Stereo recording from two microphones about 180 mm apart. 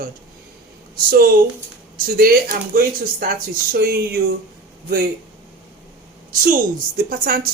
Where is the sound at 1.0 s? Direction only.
55° right (ahead or behind).